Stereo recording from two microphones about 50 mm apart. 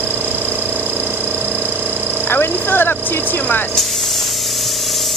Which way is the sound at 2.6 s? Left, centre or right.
Left.